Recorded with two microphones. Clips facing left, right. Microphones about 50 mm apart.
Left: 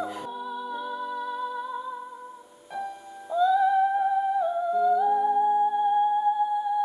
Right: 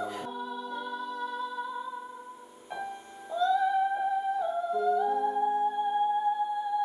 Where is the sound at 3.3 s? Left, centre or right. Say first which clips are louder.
Left 5 dB; centre.